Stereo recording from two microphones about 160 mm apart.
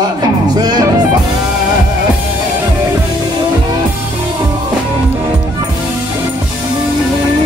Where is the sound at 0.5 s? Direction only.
25° right (ahead or behind).